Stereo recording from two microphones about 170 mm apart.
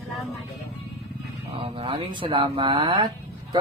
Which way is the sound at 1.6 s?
35° right (ahead or behind).